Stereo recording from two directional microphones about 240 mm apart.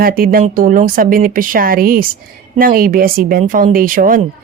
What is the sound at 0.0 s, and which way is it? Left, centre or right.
A woman's voice, right.